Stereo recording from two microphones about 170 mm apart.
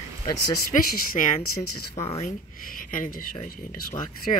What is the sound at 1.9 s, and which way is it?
Speech, 40° left (ahead or behind).